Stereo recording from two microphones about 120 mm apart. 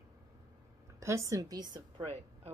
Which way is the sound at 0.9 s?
25° right (ahead or behind).